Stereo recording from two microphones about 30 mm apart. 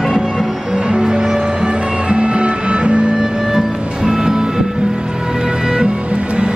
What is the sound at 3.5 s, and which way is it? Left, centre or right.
Music, right.